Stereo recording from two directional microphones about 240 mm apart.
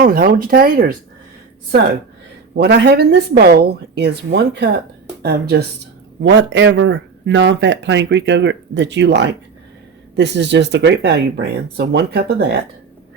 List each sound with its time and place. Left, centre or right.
0.0 s speech: right
2.6 s speech: right